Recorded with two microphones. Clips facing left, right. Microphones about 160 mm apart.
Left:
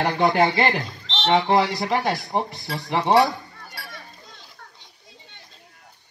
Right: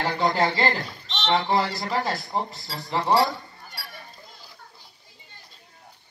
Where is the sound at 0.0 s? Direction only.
55° left (ahead or behind).